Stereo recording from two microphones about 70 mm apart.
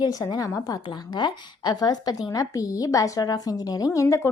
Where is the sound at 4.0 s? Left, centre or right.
Left.